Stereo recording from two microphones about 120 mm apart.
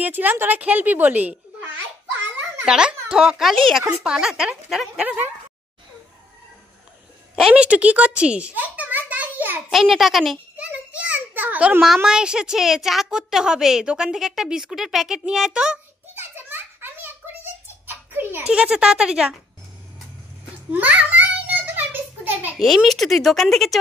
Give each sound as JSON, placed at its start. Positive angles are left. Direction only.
{"t": 0.0, "sound": "a woman's voice", "side_deg": -15}
{"t": 7.3, "sound": "a child's voice", "side_deg": -5}
{"t": 9.7, "sound": "a child's voice", "side_deg": 0}
{"t": 10.6, "sound": "a child's voice", "side_deg": -10}
{"t": 16.2, "sound": "a sound", "side_deg": -15}
{"t": 20.7, "sound": "a sound", "side_deg": -15}
{"t": 22.6, "sound": "a child's voice", "side_deg": 0}